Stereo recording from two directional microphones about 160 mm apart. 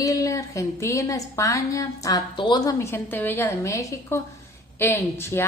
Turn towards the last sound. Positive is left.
turn(degrees=15)  # may be behind; listen again after turning